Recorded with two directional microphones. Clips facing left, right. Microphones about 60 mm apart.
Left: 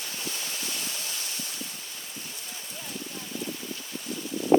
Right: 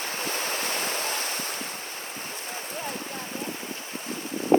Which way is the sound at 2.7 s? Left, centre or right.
Right.